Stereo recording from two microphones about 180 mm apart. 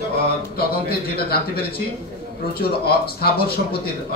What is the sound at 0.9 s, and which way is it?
A man's voice, 60° left (ahead or behind).